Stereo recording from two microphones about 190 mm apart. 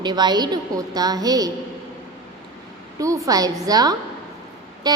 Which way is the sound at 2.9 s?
15° right (ahead or behind).